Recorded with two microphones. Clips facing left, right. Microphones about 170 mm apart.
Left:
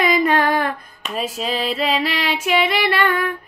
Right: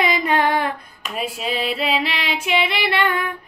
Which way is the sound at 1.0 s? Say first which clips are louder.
Left 2 dB; 10° right (ahead or behind).